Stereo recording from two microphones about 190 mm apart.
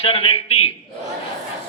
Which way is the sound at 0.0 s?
30° left (ahead or behind).